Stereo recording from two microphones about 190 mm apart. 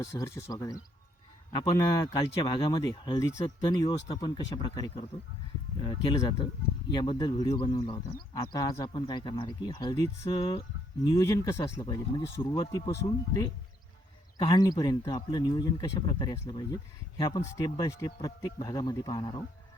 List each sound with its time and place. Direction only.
0.0 s speech: 15° left (ahead or behind)
14.3 s speech: 25° left (ahead or behind)